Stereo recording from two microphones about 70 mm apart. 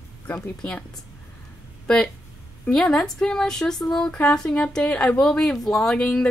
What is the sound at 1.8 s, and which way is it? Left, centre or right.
Speech, centre.